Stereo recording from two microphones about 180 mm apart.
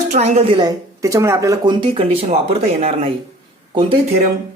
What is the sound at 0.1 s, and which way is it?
Speech, 35° right (ahead or behind).